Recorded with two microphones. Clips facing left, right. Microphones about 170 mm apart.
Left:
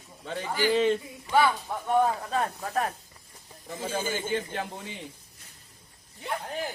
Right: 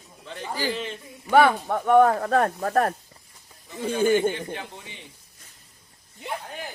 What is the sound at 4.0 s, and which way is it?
Speech, 65° right (ahead or behind).